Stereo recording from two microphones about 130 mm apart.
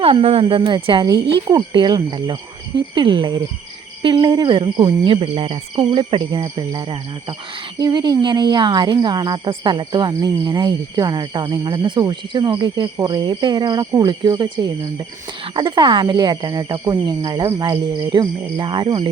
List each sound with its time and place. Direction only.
0.0 s speech: 45° right (ahead or behind)